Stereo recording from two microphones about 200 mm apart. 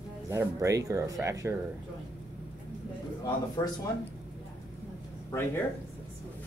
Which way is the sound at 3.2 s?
20° left (ahead or behind).